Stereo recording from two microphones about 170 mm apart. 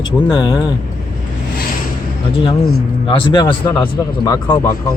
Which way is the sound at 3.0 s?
30° left (ahead or behind).